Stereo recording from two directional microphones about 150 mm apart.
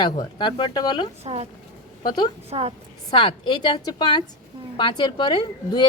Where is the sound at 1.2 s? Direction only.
45° right (ahead or behind).